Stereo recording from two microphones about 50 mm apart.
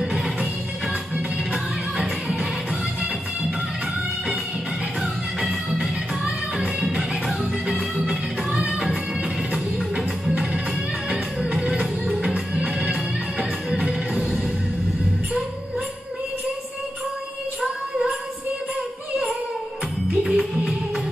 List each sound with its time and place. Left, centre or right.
1.5 s music: centre
5.0 s music: centre
8.5 s music: right
9.5 s music: centre
20.2 s music: centre